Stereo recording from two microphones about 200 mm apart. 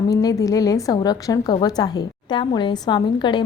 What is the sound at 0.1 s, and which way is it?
A woman's voice, 20° left (ahead or behind).